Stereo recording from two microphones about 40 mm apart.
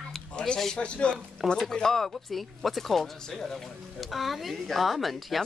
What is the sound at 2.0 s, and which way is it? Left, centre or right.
Speech, centre.